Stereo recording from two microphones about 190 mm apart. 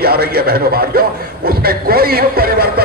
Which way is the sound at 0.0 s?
55° right (ahead or behind).